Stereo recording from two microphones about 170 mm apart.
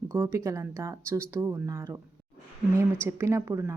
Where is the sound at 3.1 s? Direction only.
15° right (ahead or behind).